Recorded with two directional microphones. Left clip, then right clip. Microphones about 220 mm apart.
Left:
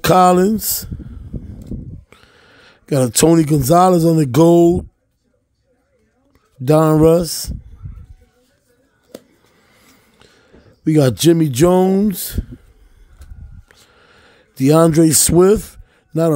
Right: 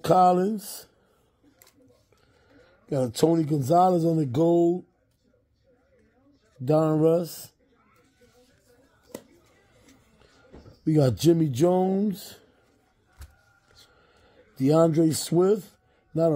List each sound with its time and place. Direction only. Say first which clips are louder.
0.0 s speech: left 8 dB; 35° left (ahead or behind)
2.0 s speech: left 14 dB; 40° left (ahead or behind)
6.6 s speech: left 10 dB; 35° left (ahead or behind)
10.8 s speech: left 9 dB; 30° left (ahead or behind)
13.9 s a sound: left 11 dB; 30° left (ahead or behind)
14.6 s speech: left 9 dB; 30° left (ahead or behind)